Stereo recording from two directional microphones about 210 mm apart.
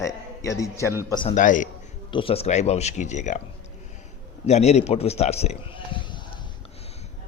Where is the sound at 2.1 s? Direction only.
25° left (ahead or behind).